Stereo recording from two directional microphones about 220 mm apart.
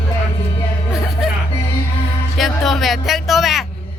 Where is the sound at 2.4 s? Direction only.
Centre (ahead or behind).